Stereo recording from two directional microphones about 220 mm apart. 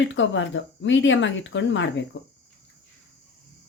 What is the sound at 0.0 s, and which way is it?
Speech, 55° left (ahead or behind).